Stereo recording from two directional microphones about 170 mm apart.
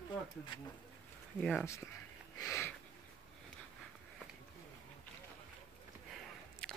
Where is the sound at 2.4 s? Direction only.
15° left (ahead or behind).